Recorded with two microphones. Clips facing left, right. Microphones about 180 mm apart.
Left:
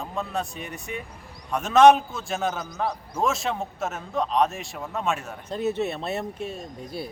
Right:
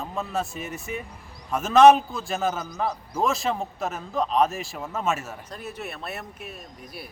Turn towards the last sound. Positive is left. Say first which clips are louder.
# left 7 dB
turn(degrees=25)  # may be behind; listen again after turning